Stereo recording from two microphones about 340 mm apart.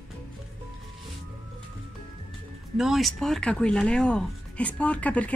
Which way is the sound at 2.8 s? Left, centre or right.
Centre.